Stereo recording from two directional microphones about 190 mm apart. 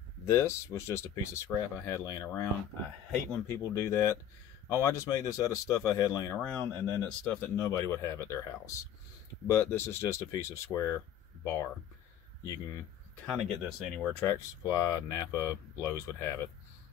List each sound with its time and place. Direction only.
0.3 s speech: 15° left (ahead or behind)
3.4 s speech: 15° left (ahead or behind)
6.4 s speech: 5° left (ahead or behind)
13.1 s speech: 5° left (ahead or behind)
14.1 s speech: 15° left (ahead or behind)